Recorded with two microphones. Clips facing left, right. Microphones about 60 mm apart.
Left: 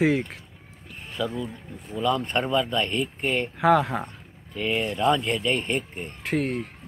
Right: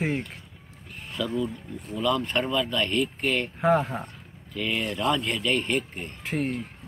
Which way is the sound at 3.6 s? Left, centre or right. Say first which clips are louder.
Left 4 dB; left.